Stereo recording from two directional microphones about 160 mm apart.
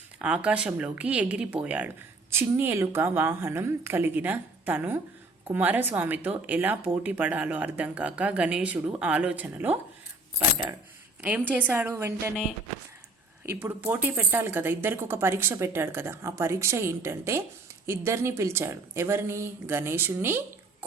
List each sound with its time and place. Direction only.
0.2 s speech: 10° right (ahead or behind)
11.2 s speech: 10° right (ahead or behind)
13.4 s speech: 15° right (ahead or behind)